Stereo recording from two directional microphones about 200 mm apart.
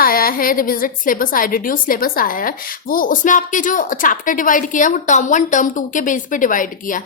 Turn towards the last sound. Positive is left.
turn(degrees=40)  # may be behind; listen again after turning